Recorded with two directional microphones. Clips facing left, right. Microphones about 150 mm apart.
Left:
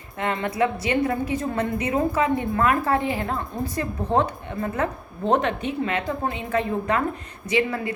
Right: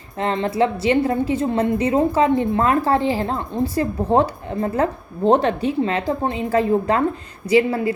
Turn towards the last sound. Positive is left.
turn(degrees=-30)  # may be behind; listen again after turning